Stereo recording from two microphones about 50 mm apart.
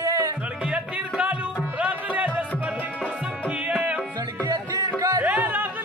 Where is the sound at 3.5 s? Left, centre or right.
Right.